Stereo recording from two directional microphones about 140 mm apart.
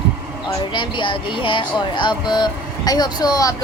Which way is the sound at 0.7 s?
35° left (ahead or behind).